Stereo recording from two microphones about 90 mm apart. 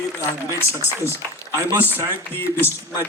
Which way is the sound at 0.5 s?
30° left (ahead or behind).